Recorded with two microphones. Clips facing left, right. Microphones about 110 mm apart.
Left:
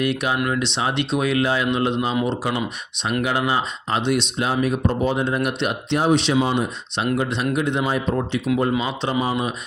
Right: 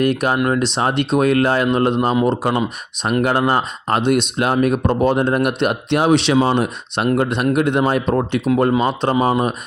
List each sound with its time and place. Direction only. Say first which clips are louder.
0.0 s speech: right 5 dB; 45° right (ahead or behind)
6.0 s speech: right 4 dB; 75° right (ahead or behind)
8.8 s speech: right 6 dB; 50° right (ahead or behind)